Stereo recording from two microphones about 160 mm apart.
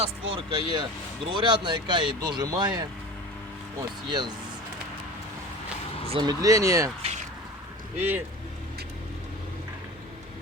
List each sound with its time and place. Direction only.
0.3 s speech: 30° right (ahead or behind)
6.1 s speech: 30° right (ahead or behind)
7.9 s speech: 10° right (ahead or behind)